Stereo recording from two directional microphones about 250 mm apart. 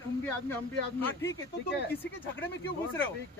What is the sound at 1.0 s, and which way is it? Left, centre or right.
Speech, centre.